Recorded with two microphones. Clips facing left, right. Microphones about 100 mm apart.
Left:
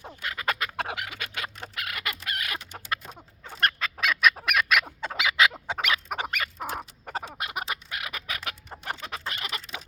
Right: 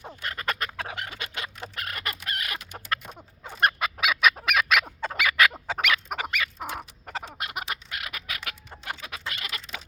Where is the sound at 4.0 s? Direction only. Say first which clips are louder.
Even; 5° right (ahead or behind).